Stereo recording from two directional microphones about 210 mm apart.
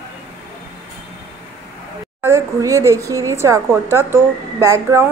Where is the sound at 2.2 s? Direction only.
10° right (ahead or behind).